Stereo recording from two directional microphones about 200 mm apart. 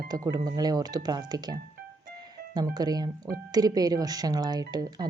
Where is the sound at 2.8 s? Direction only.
20° right (ahead or behind).